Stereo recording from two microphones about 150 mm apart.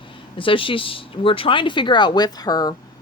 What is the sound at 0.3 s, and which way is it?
Speech, 35° left (ahead or behind).